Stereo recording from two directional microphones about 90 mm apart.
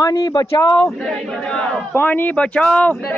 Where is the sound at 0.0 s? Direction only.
45° left (ahead or behind).